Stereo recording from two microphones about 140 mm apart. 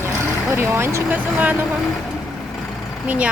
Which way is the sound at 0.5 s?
20° right (ahead or behind).